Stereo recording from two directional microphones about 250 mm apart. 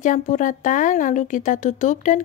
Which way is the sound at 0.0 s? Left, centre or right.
Left.